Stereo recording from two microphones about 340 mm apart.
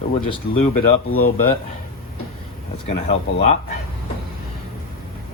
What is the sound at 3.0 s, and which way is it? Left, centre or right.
Speech, centre.